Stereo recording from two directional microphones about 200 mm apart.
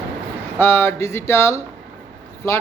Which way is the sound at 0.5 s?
10° left (ahead or behind).